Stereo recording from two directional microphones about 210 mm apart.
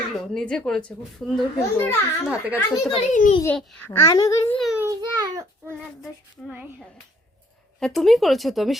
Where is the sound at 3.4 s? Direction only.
10° left (ahead or behind).